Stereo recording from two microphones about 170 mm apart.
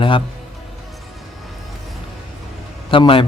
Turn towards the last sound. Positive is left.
turn(degrees=30)  # may be behind; listen again after turning